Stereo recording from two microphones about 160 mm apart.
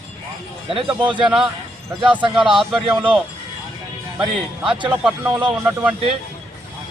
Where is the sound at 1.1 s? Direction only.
5° right (ahead or behind).